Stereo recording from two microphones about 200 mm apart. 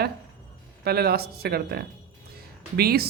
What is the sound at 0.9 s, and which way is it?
Speech, 50° right (ahead or behind).